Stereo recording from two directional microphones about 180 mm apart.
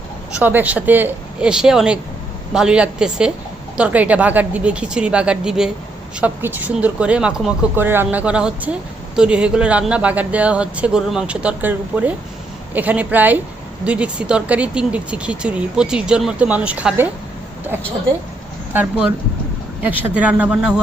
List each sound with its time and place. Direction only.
0.3 s a woman's voice: 10° right (ahead or behind)
18.7 s speech: 10° right (ahead or behind)